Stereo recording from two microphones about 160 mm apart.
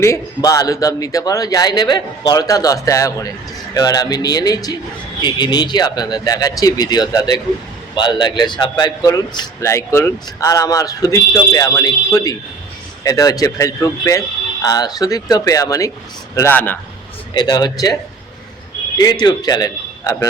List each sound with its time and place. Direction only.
0.0 s a man's voice: 20° left (ahead or behind)
17.3 s a man's voice: 25° left (ahead or behind)
18.9 s a man's voice: 25° left (ahead or behind)